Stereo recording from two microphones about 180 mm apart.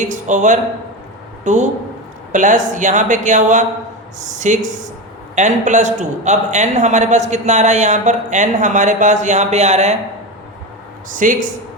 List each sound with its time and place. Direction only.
0.0 s a man's voice: 45° right (ahead or behind)
11.1 s speech: 45° right (ahead or behind)